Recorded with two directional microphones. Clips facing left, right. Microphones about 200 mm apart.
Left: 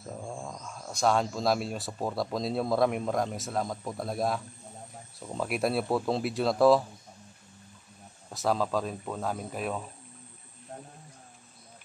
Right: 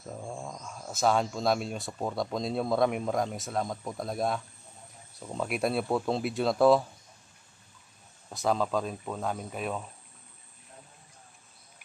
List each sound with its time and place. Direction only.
0.0 s speech: centre (ahead or behind)
8.3 s speech: centre (ahead or behind)
10.7 s a sound: 50° left (ahead or behind)